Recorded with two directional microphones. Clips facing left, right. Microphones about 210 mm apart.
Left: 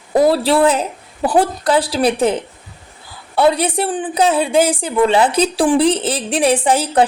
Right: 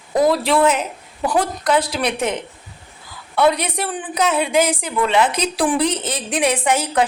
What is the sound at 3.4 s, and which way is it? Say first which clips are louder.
A woman's voice: left 3 dB; 30° left (ahead or behind).